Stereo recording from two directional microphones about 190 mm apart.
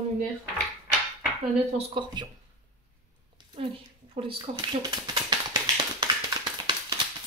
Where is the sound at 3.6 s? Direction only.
30° right (ahead or behind).